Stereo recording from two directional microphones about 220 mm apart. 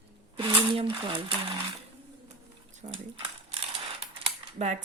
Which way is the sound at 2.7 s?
30° right (ahead or behind).